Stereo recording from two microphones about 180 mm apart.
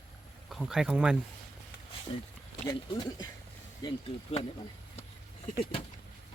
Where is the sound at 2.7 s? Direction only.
20° left (ahead or behind).